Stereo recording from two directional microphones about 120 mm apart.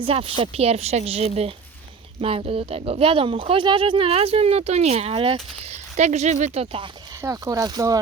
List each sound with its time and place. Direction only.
0.0 s a woman's voice: 50° right (ahead or behind)
6.0 s speech: 75° right (ahead or behind)
7.2 s speech: 25° right (ahead or behind)